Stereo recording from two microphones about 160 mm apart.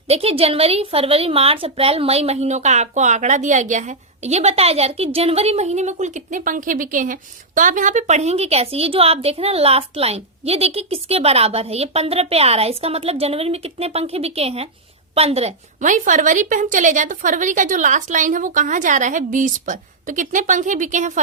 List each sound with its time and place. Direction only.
0.1 s a woman's voice: 40° right (ahead or behind)
15.8 s a woman's voice: 50° right (ahead or behind)